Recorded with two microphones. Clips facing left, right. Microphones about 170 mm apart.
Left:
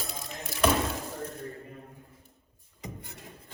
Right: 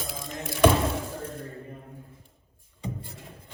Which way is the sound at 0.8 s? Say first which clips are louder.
Right 4 dB; 30° right (ahead or behind).